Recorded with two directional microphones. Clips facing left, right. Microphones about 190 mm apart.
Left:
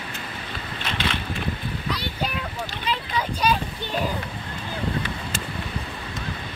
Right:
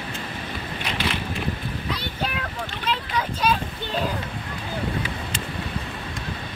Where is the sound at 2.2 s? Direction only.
Centre (ahead or behind).